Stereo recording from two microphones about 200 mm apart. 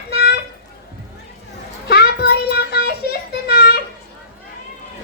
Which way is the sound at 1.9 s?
55° left (ahead or behind).